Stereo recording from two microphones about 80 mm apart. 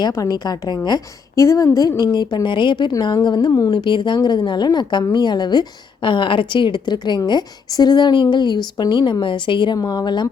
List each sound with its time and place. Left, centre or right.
0.0 s a woman's voice: left
1.4 s speech: left
2.1 s a woman's voice: left
3.2 s a woman's voice: left
9.2 s speech: left
9.7 s speech: left